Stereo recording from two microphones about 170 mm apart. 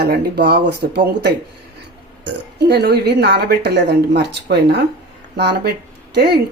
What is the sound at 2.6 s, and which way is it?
A woman's voice, 70° right (ahead or behind).